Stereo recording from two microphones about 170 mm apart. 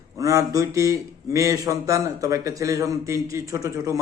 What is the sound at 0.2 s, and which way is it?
Speech, 20° right (ahead or behind).